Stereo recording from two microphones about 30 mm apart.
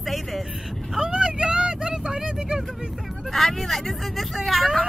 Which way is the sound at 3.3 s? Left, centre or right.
Centre.